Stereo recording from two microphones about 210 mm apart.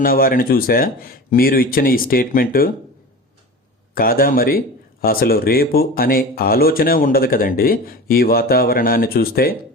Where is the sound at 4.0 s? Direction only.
45° left (ahead or behind).